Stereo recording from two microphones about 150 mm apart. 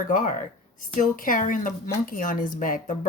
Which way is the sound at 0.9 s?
65° left (ahead or behind).